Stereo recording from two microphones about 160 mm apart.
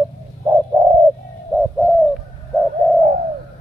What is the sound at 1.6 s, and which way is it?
Bird, centre (ahead or behind).